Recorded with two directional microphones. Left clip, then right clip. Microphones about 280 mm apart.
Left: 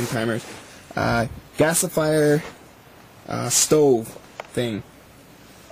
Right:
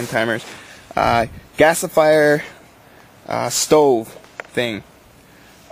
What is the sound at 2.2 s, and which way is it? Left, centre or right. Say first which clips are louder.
Speech: right 4 dB; centre.